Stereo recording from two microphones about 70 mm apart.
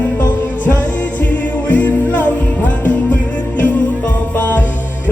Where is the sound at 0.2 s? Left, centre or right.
Left.